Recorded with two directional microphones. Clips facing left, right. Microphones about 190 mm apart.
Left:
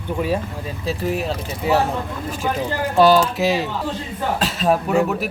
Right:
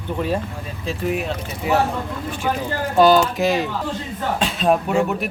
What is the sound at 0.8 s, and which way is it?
Speech, 35° left (ahead or behind).